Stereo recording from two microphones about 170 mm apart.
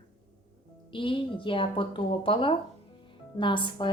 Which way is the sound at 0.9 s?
30° left (ahead or behind).